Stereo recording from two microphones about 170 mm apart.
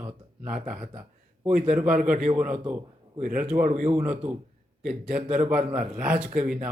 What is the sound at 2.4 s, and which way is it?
Speech, 5° right (ahead or behind).